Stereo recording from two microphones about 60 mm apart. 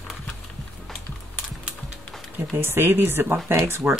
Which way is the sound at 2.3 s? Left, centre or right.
Right.